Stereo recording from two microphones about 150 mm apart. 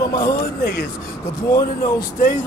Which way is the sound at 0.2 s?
90° left.